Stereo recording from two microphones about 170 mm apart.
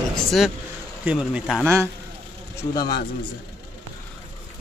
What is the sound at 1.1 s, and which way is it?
Speech, 5° right (ahead or behind).